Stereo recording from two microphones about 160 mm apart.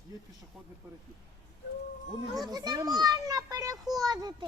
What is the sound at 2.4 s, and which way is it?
A child's voice, 25° right (ahead or behind).